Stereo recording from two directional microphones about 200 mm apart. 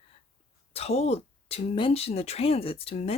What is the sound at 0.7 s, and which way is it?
Speech, 30° left (ahead or behind).